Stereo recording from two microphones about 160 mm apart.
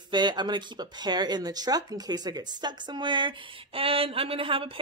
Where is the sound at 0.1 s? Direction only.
30° right (ahead or behind).